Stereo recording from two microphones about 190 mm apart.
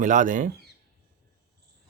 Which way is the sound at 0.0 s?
40° right (ahead or behind).